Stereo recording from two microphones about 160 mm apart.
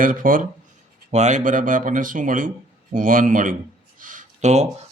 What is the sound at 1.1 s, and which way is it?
Speech, 50° right (ahead or behind).